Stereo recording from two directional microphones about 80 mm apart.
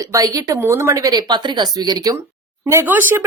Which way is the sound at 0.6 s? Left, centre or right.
Right.